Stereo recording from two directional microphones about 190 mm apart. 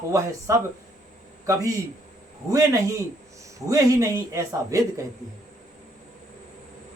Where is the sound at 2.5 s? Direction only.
15° right (ahead or behind).